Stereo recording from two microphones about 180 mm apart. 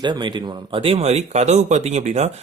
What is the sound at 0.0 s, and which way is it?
Speech, 25° right (ahead or behind).